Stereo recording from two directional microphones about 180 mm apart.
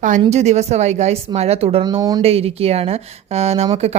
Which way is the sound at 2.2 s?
35° right (ahead or behind).